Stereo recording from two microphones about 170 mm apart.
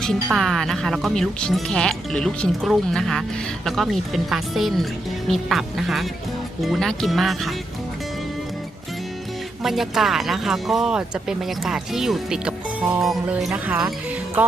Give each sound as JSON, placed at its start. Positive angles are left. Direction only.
{"t": 0.0, "sound": "speech", "side_deg": 0}
{"t": 9.6, "sound": "speech", "side_deg": 0}